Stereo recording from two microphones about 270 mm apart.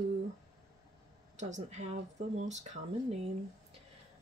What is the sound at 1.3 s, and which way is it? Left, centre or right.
Speech, right.